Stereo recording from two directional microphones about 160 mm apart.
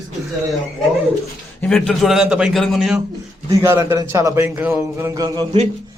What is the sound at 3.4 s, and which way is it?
A man's voice, 20° right (ahead or behind).